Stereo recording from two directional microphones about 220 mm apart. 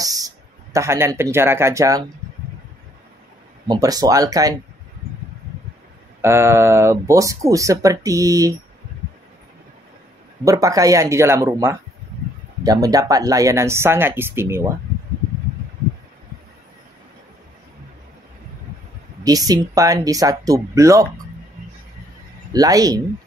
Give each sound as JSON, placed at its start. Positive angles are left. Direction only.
{"t": 0.0, "sound": "a sound", "side_deg": -15}
{"t": 0.7, "sound": "speech", "side_deg": -10}
{"t": 3.6, "sound": "speech", "side_deg": -15}
{"t": 6.2, "sound": "speech", "side_deg": -10}
{"t": 10.4, "sound": "speech", "side_deg": -15}
{"t": 19.2, "sound": "speech", "side_deg": -15}
{"t": 22.5, "sound": "speech", "side_deg": -15}